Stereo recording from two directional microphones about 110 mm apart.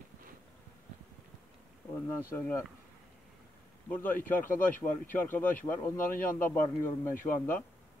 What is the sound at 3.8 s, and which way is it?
A man's voice, 15° left (ahead or behind).